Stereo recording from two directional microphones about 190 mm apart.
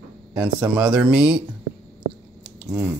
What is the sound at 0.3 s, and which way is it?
Speech, 5° right (ahead or behind).